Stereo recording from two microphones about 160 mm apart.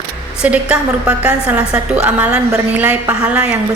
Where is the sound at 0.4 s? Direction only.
5° right (ahead or behind).